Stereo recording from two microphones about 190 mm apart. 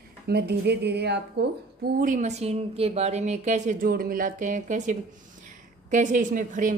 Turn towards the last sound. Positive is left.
turn(degrees=-45)  # may be behind; listen again after turning